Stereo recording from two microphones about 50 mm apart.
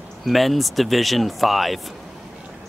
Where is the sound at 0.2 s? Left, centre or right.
Centre.